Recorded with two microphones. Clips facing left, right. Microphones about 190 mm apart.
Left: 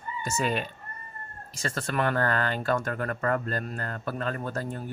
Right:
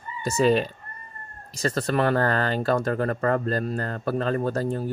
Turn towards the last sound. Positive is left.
turn(degrees=-40)  # may be behind; listen again after turning